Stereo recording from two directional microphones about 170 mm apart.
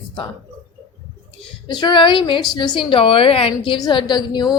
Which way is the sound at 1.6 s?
25° left (ahead or behind).